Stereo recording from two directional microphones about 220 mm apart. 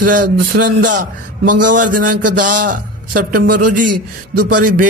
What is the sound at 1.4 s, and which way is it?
Speech, 90° right.